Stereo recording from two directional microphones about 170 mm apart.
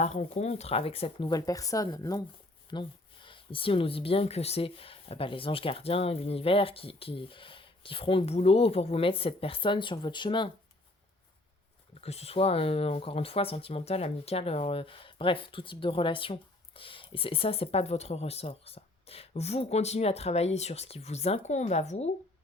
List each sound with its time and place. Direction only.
0.0 s speech: 40° left (ahead or behind)
11.9 s speech: 35° left (ahead or behind)